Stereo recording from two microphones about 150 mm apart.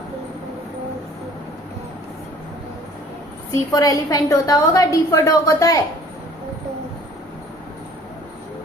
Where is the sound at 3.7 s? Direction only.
25° left (ahead or behind).